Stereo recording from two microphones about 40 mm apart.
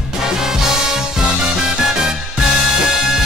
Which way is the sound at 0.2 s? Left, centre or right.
Centre.